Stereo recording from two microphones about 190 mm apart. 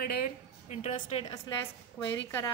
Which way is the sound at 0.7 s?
40° left (ahead or behind).